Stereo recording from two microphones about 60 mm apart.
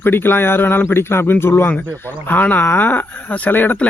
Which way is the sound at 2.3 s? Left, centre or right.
Left.